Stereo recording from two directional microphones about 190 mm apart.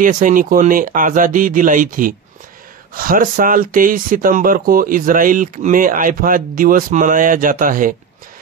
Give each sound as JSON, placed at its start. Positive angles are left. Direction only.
{"t": 0.0, "sound": "speech", "side_deg": -45}